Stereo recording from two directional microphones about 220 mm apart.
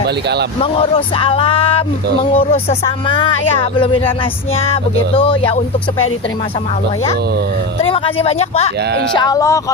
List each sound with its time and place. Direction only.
0.6 s speech: 25° left (ahead or behind)
7.9 s speech: 25° left (ahead or behind)
8.8 s speech: 50° right (ahead or behind)
9.1 s speech: 15° left (ahead or behind)